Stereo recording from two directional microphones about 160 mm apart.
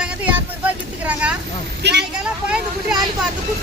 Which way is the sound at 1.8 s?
90° right.